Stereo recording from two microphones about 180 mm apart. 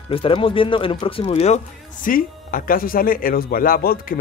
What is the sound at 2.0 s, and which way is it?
Speech, 50° left (ahead or behind).